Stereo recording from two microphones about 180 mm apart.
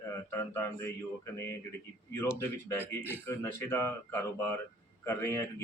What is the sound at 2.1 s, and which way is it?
Speech, 15° left (ahead or behind).